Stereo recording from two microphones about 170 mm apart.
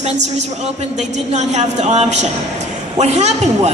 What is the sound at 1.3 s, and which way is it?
A woman's voice, 40° right (ahead or behind).